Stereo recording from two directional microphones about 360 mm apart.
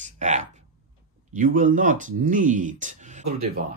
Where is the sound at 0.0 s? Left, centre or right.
Centre.